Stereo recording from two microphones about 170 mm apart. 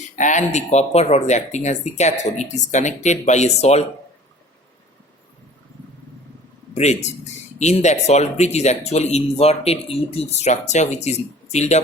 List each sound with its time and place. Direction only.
0.2 s speech: 45° left (ahead or behind)
7.6 s speech: 40° left (ahead or behind)